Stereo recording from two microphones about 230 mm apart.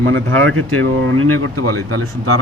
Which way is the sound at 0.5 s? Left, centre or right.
Right.